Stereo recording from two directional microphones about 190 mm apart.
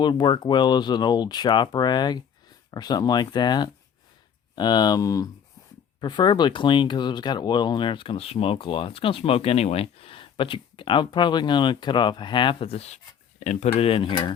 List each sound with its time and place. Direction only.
0.0 s speech: 25° left (ahead or behind)